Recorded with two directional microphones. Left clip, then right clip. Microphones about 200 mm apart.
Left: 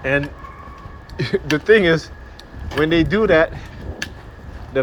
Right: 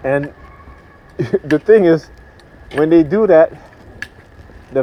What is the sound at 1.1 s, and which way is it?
Speech, 50° right (ahead or behind).